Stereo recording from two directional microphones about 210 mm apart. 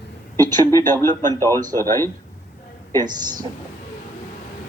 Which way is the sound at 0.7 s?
10° left (ahead or behind).